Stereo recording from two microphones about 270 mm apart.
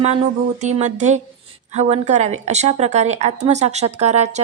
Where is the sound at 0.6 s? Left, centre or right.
Right.